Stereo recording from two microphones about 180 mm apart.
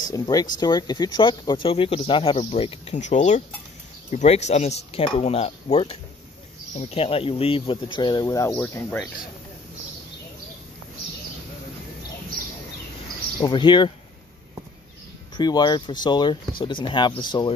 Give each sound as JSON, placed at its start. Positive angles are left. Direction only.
{"t": 0.1, "sound": "speech", "side_deg": 20}
{"t": 13.4, "sound": "speech", "side_deg": 25}
{"t": 15.3, "sound": "speech", "side_deg": 25}